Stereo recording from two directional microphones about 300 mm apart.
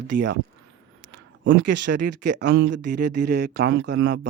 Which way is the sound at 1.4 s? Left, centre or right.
Right.